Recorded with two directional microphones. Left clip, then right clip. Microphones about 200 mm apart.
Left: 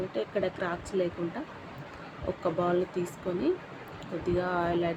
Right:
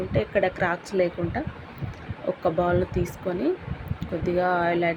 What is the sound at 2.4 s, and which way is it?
Speech, 10° right (ahead or behind).